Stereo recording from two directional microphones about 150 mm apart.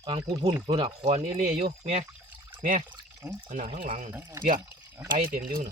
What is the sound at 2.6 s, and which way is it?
Speech, 60° right (ahead or behind).